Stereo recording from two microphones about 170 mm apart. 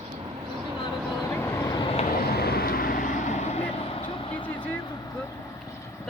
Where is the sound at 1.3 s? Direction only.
15° left (ahead or behind).